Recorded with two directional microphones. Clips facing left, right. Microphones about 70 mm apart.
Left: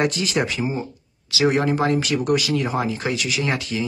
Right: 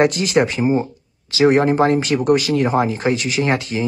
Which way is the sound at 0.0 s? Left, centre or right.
Right.